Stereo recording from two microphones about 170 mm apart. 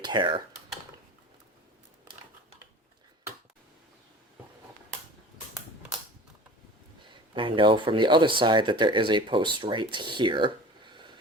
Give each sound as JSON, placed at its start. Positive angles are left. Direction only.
{"t": 0.0, "sound": "speech", "side_deg": -25}
{"t": 7.3, "sound": "speech", "side_deg": -30}